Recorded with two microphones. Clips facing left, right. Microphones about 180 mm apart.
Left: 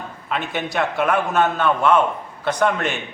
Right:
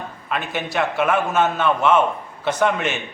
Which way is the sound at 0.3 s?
5° right (ahead or behind).